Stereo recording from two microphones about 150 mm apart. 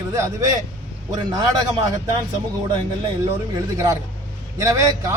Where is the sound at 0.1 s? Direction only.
25° right (ahead or behind).